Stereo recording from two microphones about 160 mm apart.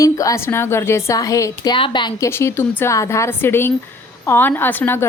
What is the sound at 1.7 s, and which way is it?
Speech, 30° left (ahead or behind).